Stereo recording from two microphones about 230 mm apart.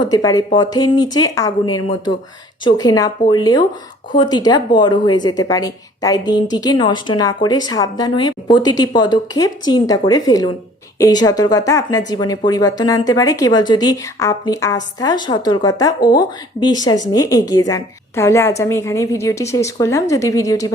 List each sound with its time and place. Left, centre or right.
0.0 s a woman's voice: centre